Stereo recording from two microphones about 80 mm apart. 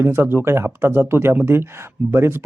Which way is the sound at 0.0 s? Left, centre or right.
Right.